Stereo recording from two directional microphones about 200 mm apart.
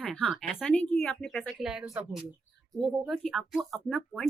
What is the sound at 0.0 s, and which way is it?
A woman's voice, 5° left (ahead or behind).